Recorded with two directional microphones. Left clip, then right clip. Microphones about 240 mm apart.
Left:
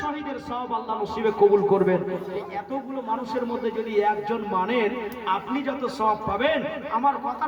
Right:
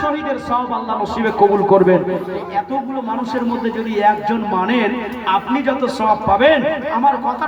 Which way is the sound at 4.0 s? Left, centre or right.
Right.